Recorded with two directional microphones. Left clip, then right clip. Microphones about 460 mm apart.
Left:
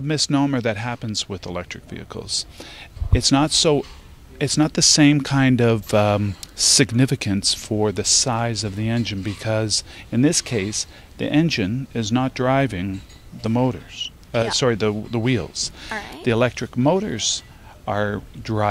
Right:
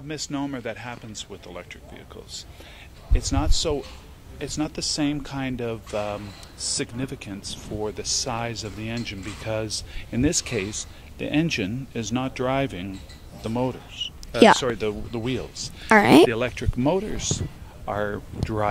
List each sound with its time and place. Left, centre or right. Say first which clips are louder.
0.1 s speech: left 10 dB; left
15.9 s speech: right 17 dB; right
16.3 s speech: left 6 dB; left